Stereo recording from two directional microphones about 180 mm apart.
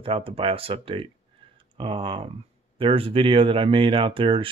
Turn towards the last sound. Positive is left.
turn(degrees=-30)  # may be behind; listen again after turning